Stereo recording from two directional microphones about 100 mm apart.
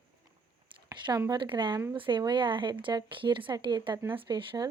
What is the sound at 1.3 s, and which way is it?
Speech, 50° right (ahead or behind).